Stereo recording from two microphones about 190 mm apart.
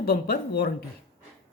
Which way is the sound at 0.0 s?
55° left (ahead or behind).